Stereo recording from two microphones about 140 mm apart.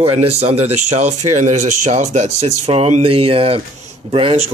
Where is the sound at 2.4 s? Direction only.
45° right (ahead or behind).